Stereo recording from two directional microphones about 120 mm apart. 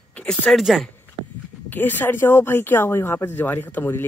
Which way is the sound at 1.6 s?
15° left (ahead or behind).